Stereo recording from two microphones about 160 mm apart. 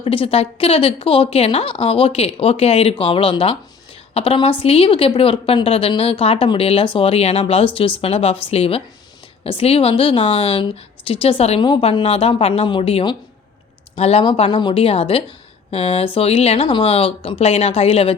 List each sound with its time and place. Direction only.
0.0 s a woman's voice: 35° left (ahead or behind)